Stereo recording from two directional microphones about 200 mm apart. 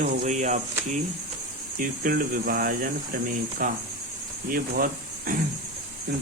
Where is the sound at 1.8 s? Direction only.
45° right (ahead or behind).